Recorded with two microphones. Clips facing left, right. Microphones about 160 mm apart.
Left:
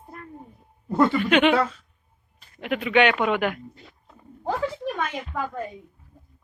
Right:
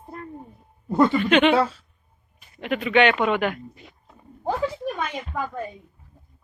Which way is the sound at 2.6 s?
5° left (ahead or behind).